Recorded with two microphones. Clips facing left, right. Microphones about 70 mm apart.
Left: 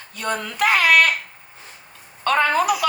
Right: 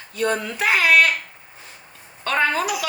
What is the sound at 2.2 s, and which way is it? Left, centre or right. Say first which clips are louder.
Speech: left 3 dB; left.